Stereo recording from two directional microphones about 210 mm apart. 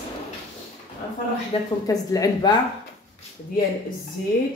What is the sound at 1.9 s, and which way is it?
Speech, 15° left (ahead or behind).